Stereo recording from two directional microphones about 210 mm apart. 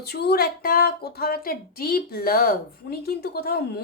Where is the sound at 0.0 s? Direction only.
50° left (ahead or behind).